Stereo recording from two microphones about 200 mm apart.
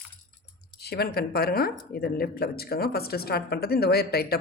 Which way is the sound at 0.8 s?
50° left (ahead or behind).